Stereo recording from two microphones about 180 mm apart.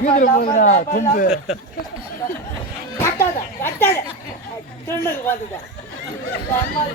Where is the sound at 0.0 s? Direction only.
50° left (ahead or behind).